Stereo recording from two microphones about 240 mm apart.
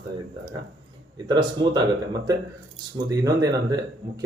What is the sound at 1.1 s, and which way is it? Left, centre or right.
Speech, centre.